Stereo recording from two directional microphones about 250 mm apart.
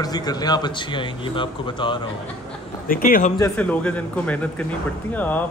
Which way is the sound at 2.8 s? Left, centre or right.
Left.